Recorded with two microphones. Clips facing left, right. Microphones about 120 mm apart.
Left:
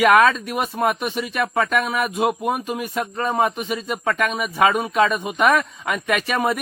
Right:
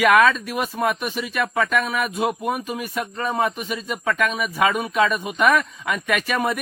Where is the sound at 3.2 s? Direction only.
15° left (ahead or behind).